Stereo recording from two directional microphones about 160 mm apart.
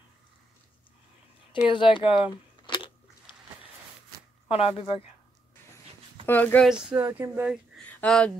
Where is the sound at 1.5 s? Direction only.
30° left (ahead or behind).